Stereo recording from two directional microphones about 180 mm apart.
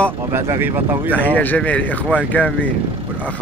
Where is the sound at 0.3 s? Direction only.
15° right (ahead or behind).